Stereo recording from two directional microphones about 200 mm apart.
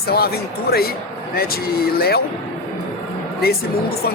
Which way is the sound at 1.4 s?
50° left (ahead or behind).